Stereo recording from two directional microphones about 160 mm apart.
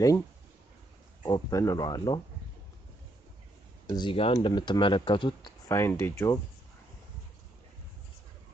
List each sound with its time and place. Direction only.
1.2 s speech: 20° left (ahead or behind)
3.9 s speech: 30° left (ahead or behind)
5.7 s speech: 15° left (ahead or behind)